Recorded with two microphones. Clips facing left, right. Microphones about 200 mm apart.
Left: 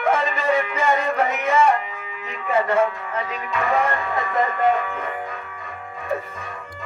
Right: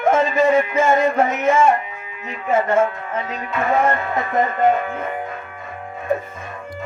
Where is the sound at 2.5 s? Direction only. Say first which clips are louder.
Right 2 dB; 45° right (ahead or behind).